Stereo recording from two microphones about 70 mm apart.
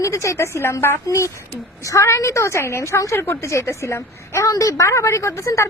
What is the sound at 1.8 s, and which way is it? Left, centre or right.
A woman's voice, left.